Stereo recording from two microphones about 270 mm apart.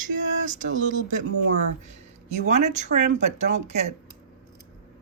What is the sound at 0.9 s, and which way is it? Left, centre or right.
Speech, right.